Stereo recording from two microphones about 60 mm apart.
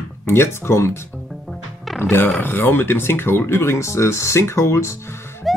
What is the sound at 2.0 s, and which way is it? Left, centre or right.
Speech, left.